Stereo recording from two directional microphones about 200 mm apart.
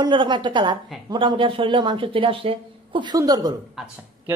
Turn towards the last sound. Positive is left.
turn(degrees=-10)  # may be behind; listen again after turning